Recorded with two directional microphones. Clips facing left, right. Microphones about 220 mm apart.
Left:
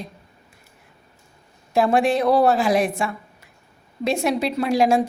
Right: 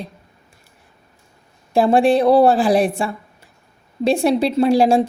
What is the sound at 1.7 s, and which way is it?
A woman's voice, 30° right (ahead or behind).